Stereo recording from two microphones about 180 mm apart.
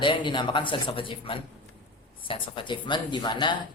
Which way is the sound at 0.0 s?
25° left (ahead or behind).